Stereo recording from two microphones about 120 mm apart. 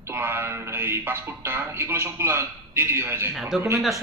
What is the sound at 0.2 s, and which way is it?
Speech, 20° right (ahead or behind).